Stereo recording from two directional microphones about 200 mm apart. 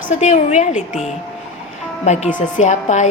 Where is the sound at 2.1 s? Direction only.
35° left (ahead or behind).